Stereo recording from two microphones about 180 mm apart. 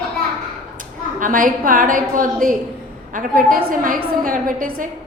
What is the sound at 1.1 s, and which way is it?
A woman's voice, 50° right (ahead or behind).